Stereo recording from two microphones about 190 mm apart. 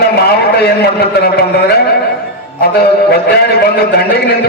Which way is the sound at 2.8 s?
55° left (ahead or behind).